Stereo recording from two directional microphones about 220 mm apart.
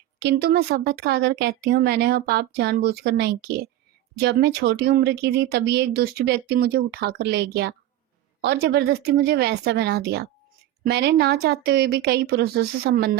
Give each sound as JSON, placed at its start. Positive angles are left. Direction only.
{"t": 0.2, "sound": "speech", "side_deg": -50}